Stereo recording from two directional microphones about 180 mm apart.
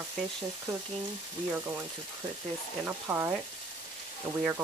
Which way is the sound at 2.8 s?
15° right (ahead or behind).